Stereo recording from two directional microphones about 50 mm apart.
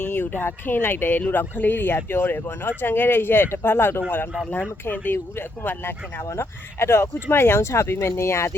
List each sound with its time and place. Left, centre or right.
0.0 s speech: left
6.3 s speech: left